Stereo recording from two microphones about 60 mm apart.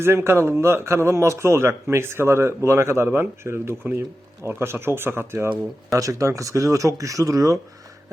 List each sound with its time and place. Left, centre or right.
0.0 s a man's voice: right
5.9 s speech: right